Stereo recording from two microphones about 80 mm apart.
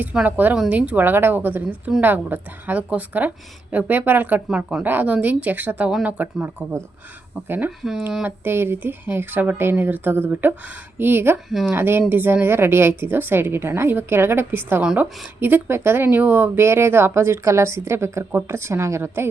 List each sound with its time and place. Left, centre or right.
0.0 s a woman's voice: centre
14.8 s speech: centre
15.4 s speech: right